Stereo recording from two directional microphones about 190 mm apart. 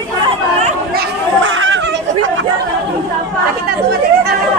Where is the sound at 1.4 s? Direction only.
80° right.